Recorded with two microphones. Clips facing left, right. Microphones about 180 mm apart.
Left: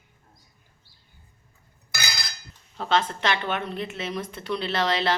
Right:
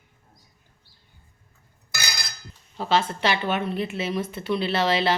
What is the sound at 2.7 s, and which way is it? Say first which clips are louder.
A woman's voice: right 1 dB; 5° right (ahead or behind).